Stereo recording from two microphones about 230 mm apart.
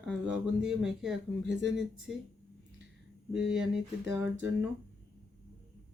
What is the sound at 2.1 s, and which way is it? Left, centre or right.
Speech, centre.